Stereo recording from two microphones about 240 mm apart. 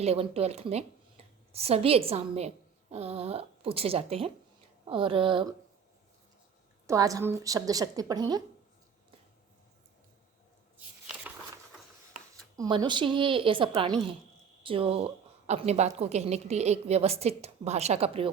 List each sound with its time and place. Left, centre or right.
0.0 s a woman's voice: right
6.8 s a woman's voice: centre
10.8 s a sound: centre
12.5 s a woman's voice: centre